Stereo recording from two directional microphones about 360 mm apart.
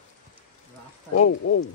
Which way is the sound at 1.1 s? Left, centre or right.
Left.